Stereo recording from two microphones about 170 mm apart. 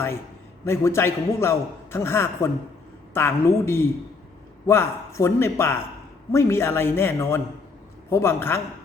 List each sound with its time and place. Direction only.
0.6 s a man's voice: 15° left (ahead or behind)